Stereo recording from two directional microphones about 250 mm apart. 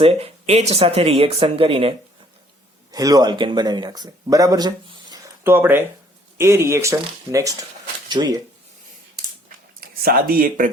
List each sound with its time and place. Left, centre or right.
0.0 s speech: right
9.8 s speech: right